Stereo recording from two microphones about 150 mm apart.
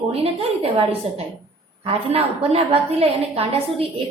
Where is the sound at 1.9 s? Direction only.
40° right (ahead or behind).